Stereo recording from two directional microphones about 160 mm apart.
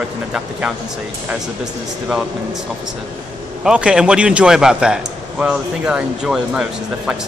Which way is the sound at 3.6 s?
5° right (ahead or behind).